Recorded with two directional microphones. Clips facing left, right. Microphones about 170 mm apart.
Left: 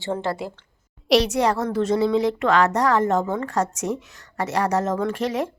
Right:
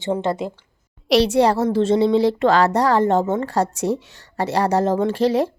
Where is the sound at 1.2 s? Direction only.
30° right (ahead or behind).